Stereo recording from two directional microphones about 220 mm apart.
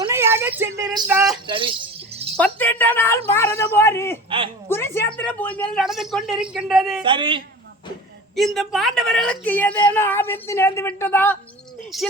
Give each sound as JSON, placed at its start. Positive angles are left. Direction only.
{"t": 0.0, "sound": "a sound", "side_deg": -10}
{"t": 1.0, "sound": "speech", "side_deg": -10}
{"t": 1.5, "sound": "a man's voice", "side_deg": -25}
{"t": 2.3, "sound": "a woman's voice", "side_deg": 5}
{"t": 4.3, "sound": "a man's voice", "side_deg": -25}
{"t": 4.7, "sound": "speech", "side_deg": 10}
{"t": 7.0, "sound": "a man's voice", "side_deg": -20}
{"t": 8.4, "sound": "a woman's voice", "side_deg": 0}